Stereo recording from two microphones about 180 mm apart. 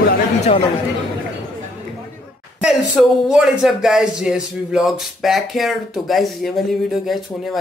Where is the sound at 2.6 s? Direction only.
5° right (ahead or behind).